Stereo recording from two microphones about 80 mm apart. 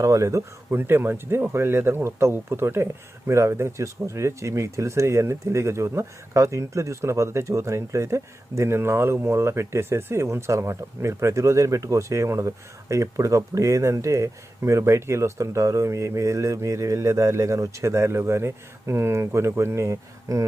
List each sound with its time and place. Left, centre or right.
0.0 s speech: right
0.7 s speech: right